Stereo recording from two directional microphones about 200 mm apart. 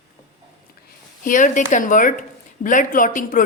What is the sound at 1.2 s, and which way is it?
A woman's voice, 40° left (ahead or behind).